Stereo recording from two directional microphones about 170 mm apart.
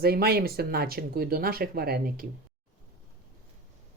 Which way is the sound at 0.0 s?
65° right (ahead or behind).